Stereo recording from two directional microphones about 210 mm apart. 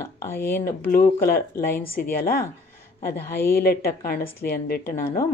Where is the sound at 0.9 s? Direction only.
45° left (ahead or behind).